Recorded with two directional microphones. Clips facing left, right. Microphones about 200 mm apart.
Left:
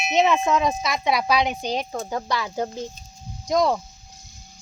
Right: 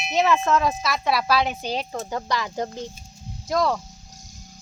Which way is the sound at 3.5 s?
20° left (ahead or behind).